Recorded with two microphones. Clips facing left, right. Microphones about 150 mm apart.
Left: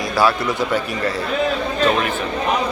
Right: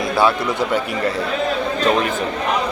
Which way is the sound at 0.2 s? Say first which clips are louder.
Even; 20° right (ahead or behind).